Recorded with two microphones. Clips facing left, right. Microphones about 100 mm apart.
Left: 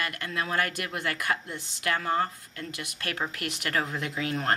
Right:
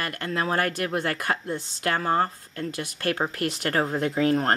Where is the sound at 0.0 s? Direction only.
40° right (ahead or behind).